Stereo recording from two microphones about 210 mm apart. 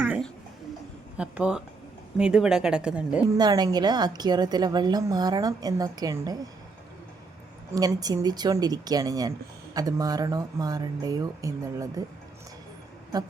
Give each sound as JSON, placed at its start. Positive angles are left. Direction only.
{"t": 1.1, "sound": "speech", "side_deg": -5}
{"t": 3.3, "sound": "a woman's voice", "side_deg": -20}
{"t": 7.8, "sound": "speech", "side_deg": -15}